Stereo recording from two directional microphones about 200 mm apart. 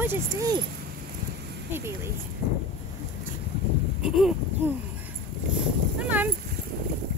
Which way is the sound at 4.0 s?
5° right (ahead or behind).